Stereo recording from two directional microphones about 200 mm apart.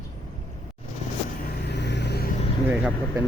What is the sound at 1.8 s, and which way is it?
Vehicle, 60° left (ahead or behind).